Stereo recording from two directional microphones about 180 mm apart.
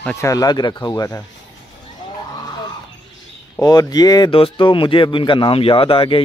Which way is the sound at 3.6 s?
20° left (ahead or behind).